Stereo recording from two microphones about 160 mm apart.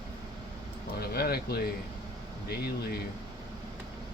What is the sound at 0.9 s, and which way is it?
Speech, 75° left (ahead or behind).